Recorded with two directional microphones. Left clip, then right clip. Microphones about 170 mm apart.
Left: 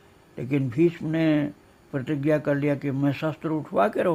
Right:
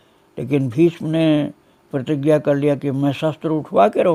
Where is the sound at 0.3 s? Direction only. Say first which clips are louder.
Right 7 dB; 35° right (ahead or behind).